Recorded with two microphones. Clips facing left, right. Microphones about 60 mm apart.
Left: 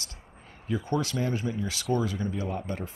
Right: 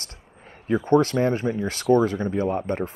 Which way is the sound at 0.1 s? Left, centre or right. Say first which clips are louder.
Right 3 dB; right.